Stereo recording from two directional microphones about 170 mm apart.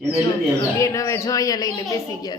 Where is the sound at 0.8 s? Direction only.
20° left (ahead or behind).